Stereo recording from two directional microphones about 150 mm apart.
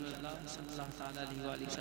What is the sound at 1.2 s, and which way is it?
Speech, 15° right (ahead or behind).